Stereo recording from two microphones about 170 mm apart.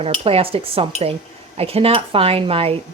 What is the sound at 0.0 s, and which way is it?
Speech, 35° right (ahead or behind).